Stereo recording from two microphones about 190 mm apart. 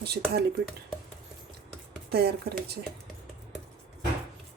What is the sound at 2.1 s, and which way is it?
Speech, 60° right (ahead or behind).